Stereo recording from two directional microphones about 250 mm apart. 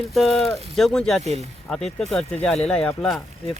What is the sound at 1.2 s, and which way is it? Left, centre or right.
Speech, right.